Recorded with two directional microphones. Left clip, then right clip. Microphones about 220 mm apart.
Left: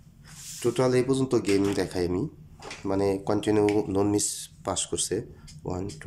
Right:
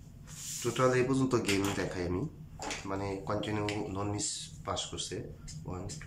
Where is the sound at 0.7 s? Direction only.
20° left (ahead or behind).